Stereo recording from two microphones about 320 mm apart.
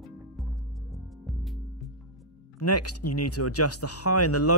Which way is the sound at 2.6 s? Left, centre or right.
Left.